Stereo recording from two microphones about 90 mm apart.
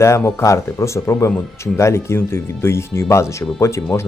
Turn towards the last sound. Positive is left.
turn(degrees=35)  # may be behind; listen again after turning